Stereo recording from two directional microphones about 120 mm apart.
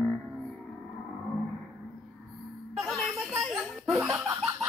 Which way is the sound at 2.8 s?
Centre (ahead or behind).